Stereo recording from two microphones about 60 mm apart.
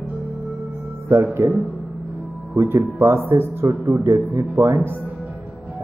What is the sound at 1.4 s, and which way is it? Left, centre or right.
Speech, right.